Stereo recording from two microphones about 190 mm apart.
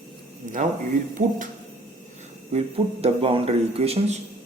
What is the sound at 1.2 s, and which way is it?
Speech, 45° right (ahead or behind).